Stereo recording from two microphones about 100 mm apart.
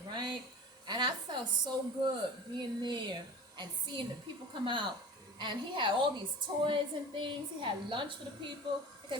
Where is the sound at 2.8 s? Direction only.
50° right (ahead or behind).